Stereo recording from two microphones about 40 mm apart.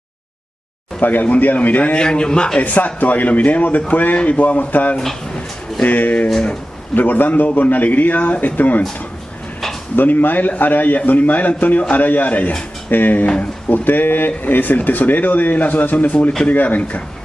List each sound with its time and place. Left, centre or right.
1.2 s a man's voice: left
2.0 s a man's voice: centre
2.6 s a man's voice: left
9.9 s a man's voice: left
16.1 s a man's voice: left